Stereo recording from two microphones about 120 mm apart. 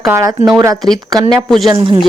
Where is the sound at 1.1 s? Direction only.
35° right (ahead or behind).